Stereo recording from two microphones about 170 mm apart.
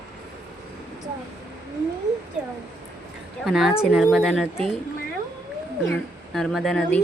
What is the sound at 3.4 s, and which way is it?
A woman's voice, centre (ahead or behind).